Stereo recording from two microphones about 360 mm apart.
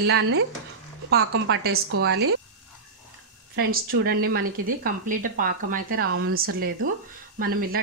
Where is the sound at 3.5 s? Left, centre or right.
Right.